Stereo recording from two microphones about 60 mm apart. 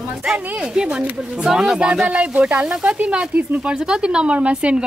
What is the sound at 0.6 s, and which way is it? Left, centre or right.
Speech, centre.